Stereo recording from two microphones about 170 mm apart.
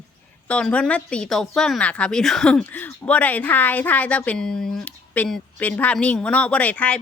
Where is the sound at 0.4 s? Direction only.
5° left (ahead or behind).